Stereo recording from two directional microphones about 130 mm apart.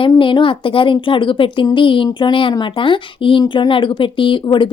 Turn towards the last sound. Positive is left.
turn(degrees=40)  # may be behind; listen again after turning